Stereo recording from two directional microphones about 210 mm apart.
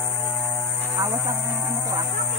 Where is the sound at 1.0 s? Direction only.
15° right (ahead or behind).